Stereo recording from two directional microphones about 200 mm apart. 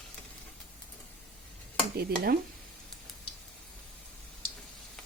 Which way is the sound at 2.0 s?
50° right (ahead or behind).